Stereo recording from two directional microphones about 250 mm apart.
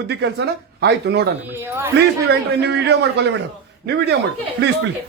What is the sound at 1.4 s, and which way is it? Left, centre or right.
Speech, centre.